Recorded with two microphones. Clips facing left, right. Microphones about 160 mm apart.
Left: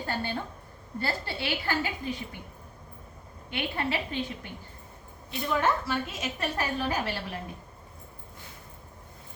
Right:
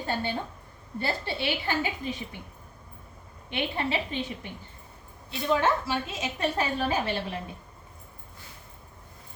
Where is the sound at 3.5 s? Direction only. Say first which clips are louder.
Right 2 dB; 20° right (ahead or behind).